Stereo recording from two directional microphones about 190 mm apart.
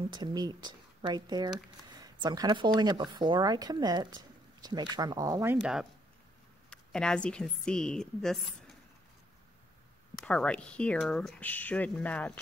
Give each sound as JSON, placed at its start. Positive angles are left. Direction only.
{"t": 0.1, "sound": "a woman's voice", "side_deg": -20}
{"t": 10.1, "sound": "speech", "side_deg": 5}